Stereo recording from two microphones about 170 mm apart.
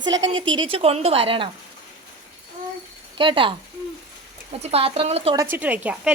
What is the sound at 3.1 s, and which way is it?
Speech, 30° right (ahead or behind).